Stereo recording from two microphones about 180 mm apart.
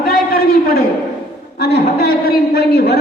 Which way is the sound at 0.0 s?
55° left (ahead or behind).